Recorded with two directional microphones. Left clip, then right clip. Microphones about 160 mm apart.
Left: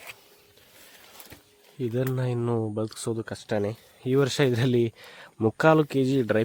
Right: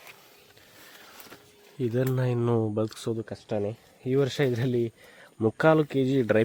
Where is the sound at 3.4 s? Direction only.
30° left (ahead or behind).